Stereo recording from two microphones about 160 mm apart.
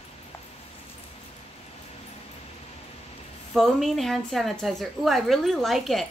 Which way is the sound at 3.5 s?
Centre (ahead or behind).